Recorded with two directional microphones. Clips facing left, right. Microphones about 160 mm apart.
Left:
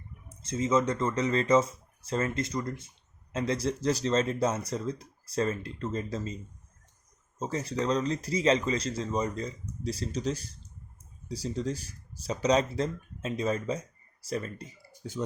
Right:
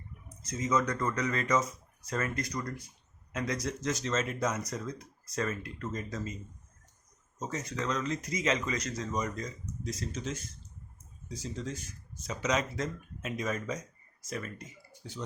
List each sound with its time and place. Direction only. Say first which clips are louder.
0.3 s speech: left 4 dB; 30° left (ahead or behind)
7.3 s speech: left 5 dB; 30° left (ahead or behind)